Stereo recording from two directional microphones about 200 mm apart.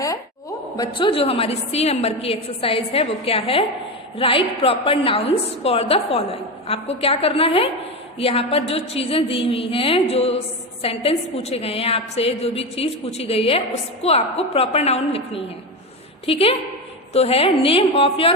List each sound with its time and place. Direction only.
0.8 s a woman's voice: 25° left (ahead or behind)
16.2 s a woman's voice: 30° left (ahead or behind)